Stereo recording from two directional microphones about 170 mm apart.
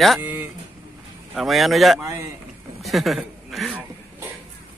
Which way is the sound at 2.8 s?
Centre (ahead or behind).